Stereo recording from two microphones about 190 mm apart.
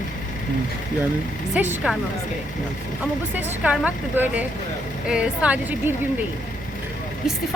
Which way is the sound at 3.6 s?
5° right (ahead or behind).